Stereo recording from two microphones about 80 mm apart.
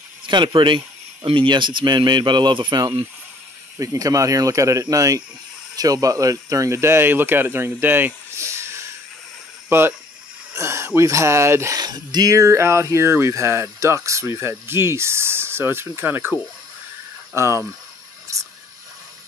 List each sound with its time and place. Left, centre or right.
0.3 s speech: right
3.7 s speech: right
10.5 s a sound: right
11.0 s speech: right
11.7 s speech: right
17.4 s speech: right